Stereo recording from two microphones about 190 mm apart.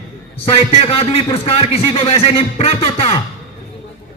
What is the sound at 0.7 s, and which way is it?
A man's voice, 30° left (ahead or behind).